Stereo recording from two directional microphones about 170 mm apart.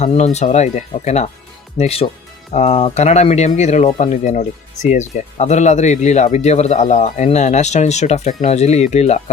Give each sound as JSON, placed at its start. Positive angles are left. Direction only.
{"t": 0.0, "sound": "speech", "side_deg": 40}